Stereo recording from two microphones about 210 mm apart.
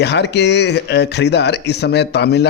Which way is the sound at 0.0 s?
55° left (ahead or behind).